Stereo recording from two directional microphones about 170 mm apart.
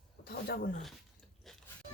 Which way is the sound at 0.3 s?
65° left (ahead or behind).